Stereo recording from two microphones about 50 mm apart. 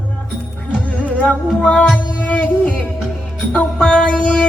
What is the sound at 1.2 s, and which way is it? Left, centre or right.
Music, left.